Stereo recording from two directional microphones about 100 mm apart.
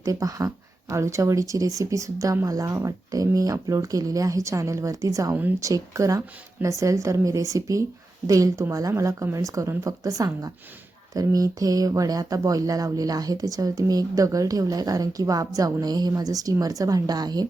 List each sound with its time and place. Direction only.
0.0 s speech: 35° right (ahead or behind)
5.3 s speech: 20° right (ahead or behind)
5.6 s speech: 35° right (ahead or behind)